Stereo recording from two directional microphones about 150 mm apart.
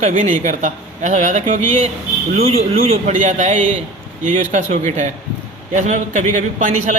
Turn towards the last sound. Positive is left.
turn(degrees=-55)  # may be behind; listen again after turning